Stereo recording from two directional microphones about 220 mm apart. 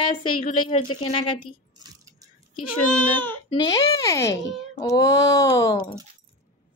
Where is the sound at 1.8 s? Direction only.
15° right (ahead or behind).